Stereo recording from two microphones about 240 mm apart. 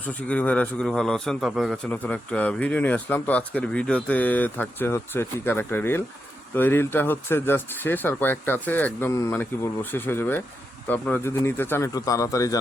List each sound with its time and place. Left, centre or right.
0.1 s a man's voice: centre